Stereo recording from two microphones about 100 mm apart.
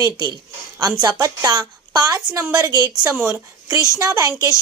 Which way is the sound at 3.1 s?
25° right (ahead or behind).